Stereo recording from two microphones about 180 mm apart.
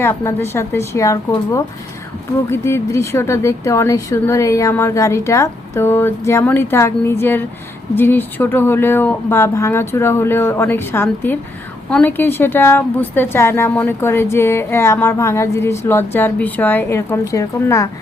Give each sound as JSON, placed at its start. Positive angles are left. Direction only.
{"t": 0.0, "sound": "speech", "side_deg": 15}